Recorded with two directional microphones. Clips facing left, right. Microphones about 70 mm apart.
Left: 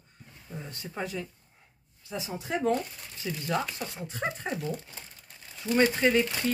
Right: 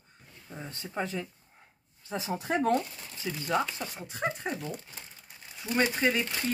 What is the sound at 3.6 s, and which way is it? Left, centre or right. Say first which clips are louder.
Speech: right 1 dB; centre.